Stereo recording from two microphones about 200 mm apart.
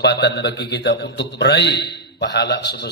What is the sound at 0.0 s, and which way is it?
A man's voice, 55° left (ahead or behind).